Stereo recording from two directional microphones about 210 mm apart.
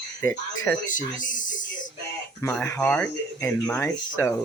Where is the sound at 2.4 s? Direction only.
10° left (ahead or behind).